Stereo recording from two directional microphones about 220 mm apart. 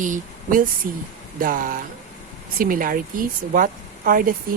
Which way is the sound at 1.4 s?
40° right (ahead or behind).